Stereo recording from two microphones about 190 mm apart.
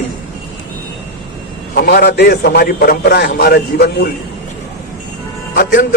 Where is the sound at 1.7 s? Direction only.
55° left (ahead or behind).